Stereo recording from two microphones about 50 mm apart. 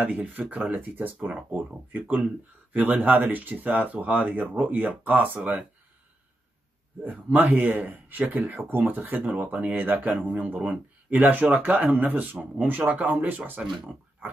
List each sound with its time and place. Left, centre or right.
0.0 s speech: right
7.0 s speech: right
14.2 s a sound: right